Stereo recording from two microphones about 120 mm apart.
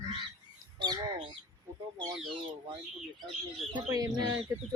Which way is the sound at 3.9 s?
35° right (ahead or behind).